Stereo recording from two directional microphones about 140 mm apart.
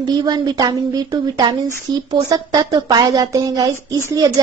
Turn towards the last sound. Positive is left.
turn(degrees=-25)  # may be behind; listen again after turning